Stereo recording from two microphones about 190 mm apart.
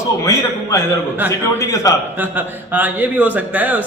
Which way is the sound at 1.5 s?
15° left (ahead or behind).